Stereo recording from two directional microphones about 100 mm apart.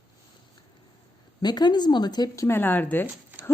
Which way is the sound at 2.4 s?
20° left (ahead or behind).